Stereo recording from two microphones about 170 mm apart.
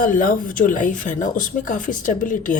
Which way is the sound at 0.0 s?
55° left (ahead or behind).